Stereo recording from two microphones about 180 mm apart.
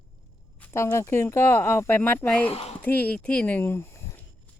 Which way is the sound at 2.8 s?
10° left (ahead or behind).